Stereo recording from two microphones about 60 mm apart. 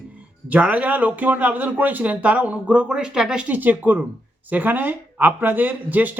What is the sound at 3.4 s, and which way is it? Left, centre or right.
A man's voice, right.